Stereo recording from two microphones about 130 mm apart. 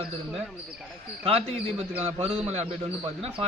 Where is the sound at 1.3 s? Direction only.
50° right (ahead or behind).